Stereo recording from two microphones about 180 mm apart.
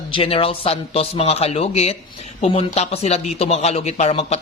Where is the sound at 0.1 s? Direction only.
30° left (ahead or behind).